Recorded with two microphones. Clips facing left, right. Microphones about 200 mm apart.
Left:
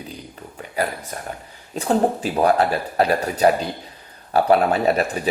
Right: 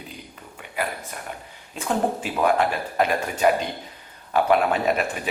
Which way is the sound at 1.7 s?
35° left (ahead or behind).